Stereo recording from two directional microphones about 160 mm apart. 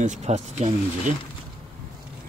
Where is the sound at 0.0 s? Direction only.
50° right (ahead or behind).